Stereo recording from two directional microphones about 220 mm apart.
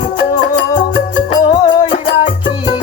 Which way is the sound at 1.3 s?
25° left (ahead or behind).